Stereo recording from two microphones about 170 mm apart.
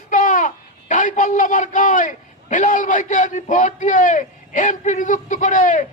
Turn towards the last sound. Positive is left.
turn(degrees=50)  # may be behind; listen again after turning